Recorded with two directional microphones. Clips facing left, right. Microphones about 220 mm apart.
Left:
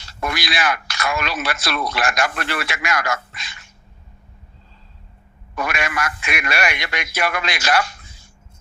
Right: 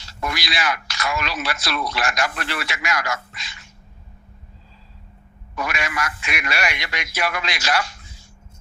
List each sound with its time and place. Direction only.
0.0 s speech: 55° left (ahead or behind)
5.5 s speech: 55° left (ahead or behind)